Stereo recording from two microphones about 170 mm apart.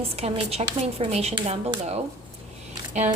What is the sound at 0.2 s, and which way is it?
A woman's voice, 35° right (ahead or behind).